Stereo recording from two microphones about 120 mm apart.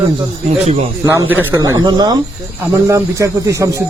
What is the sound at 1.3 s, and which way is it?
Speech, 15° right (ahead or behind).